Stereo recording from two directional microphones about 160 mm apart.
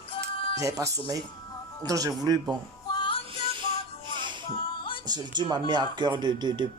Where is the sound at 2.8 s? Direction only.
30° left (ahead or behind).